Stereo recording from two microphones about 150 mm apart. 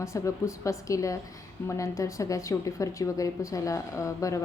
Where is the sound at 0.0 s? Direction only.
20° left (ahead or behind).